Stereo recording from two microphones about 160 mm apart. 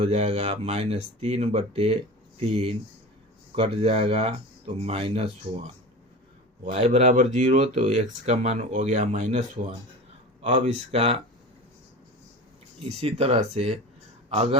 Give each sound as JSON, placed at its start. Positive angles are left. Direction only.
{"t": 0.0, "sound": "speech", "side_deg": -40}
{"t": 6.7, "sound": "speech", "side_deg": -40}
{"t": 10.4, "sound": "speech", "side_deg": -45}
{"t": 12.8, "sound": "a man's voice", "side_deg": -40}